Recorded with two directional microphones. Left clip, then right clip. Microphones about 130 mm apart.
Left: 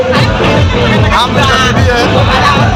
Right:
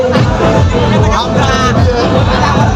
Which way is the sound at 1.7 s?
15° right (ahead or behind).